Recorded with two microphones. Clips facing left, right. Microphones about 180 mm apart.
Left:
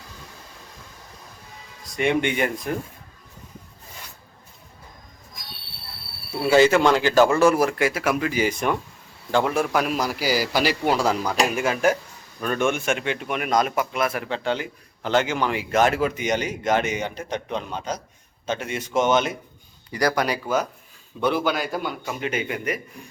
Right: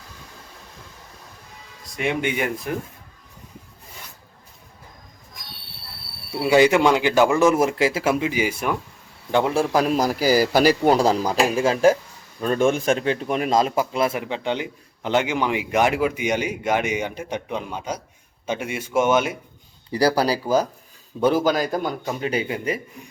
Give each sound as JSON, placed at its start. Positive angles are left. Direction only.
{"t": 1.8, "sound": "speech", "side_deg": 0}
{"t": 6.4, "sound": "a man's voice", "side_deg": -15}
{"t": 9.3, "sound": "a man's voice", "side_deg": -25}
{"t": 19.9, "sound": "a man's voice", "side_deg": -30}